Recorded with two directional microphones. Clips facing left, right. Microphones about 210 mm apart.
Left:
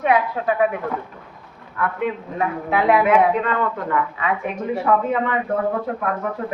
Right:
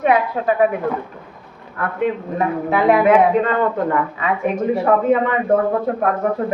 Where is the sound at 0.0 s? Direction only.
35° right (ahead or behind).